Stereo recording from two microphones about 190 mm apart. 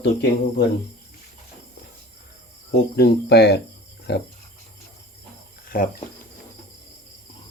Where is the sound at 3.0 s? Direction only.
60° left (ahead or behind).